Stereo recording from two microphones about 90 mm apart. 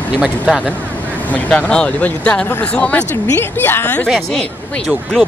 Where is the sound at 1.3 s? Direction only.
10° left (ahead or behind).